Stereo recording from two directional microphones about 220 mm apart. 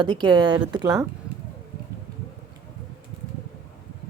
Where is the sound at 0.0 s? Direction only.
20° right (ahead or behind).